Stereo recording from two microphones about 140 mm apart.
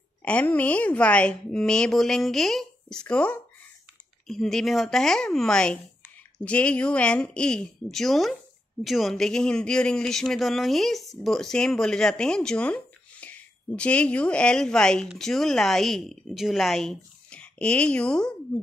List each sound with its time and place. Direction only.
0.2 s a woman's voice: 10° left (ahead or behind)